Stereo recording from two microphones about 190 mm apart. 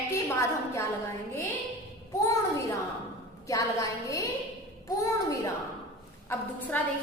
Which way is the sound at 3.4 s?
15° left (ahead or behind).